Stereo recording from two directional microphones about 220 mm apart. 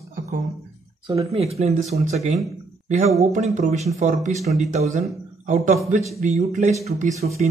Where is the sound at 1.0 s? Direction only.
25° right (ahead or behind).